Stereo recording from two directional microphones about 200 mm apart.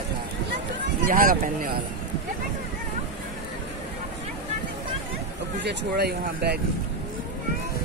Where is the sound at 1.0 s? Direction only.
45° right (ahead or behind).